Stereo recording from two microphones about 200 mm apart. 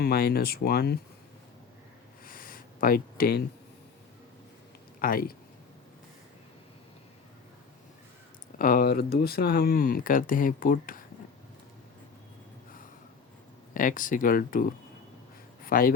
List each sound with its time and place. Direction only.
0.0 s speech: 50° left (ahead or behind)
2.2 s a sound: 45° left (ahead or behind)
4.9 s speech: 45° left (ahead or behind)
8.5 s speech: 45° left (ahead or behind)
13.7 s a man's voice: 40° left (ahead or behind)